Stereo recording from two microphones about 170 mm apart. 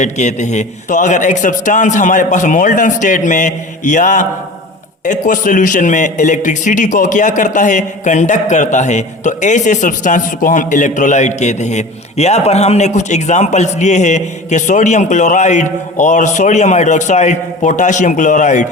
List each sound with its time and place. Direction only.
0.0 s a man's voice: 45° left (ahead or behind)